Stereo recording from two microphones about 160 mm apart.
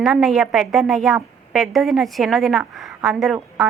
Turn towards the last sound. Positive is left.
turn(degrees=0)  # may be behind; listen again after turning